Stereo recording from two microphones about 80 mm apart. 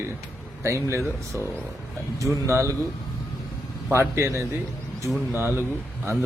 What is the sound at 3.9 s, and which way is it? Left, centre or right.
A man's voice, right.